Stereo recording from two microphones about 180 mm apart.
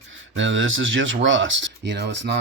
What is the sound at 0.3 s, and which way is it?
Speech, 90° right.